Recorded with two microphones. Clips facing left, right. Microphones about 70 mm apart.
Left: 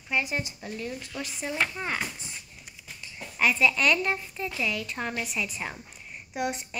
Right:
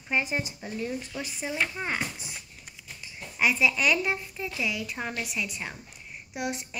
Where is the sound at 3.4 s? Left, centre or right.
Centre.